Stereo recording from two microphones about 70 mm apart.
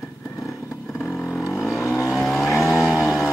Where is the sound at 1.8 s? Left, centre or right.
Left.